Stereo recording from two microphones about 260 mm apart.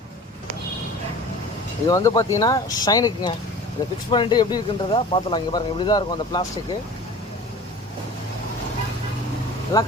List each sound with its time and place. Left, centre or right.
1.9 s speech: centre
9.7 s speech: centre